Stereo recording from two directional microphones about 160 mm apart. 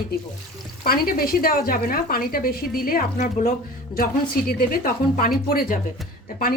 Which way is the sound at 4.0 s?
70° left (ahead or behind).